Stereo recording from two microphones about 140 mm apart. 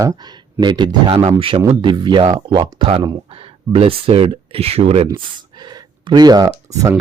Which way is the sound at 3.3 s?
45° right (ahead or behind).